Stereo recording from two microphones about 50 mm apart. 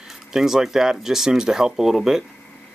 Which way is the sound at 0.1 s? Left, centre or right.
Centre.